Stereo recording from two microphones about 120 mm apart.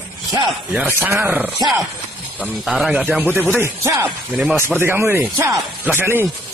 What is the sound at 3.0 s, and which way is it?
Speech, 20° right (ahead or behind).